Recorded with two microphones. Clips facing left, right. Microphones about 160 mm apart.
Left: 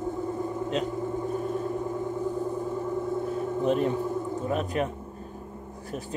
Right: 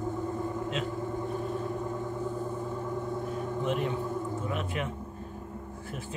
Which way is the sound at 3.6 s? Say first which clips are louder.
Left 6 dB; 40° left (ahead or behind).